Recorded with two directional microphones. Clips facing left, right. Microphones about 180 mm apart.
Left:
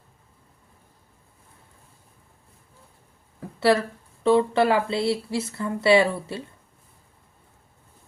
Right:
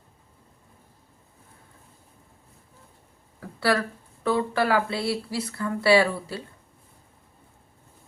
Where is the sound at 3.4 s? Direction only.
25° left (ahead or behind).